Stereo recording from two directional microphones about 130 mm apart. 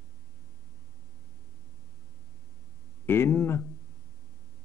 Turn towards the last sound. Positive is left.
turn(degrees=20)  # may be behind; listen again after turning